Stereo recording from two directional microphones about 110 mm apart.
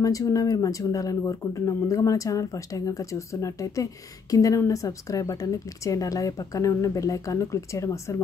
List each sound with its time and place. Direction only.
0.0 s speech: 30° left (ahead or behind)